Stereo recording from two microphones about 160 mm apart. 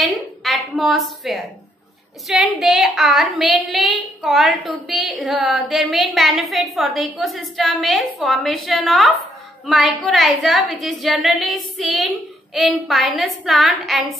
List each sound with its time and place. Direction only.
0.0 s a woman's voice: centre (ahead or behind)